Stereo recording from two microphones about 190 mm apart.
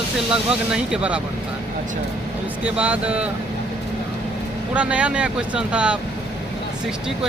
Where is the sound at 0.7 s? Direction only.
5° right (ahead or behind).